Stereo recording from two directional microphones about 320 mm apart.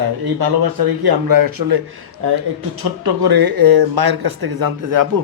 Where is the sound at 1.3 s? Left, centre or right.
Right.